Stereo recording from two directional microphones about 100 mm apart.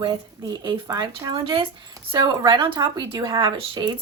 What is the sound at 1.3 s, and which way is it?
Speech, 65° right (ahead or behind).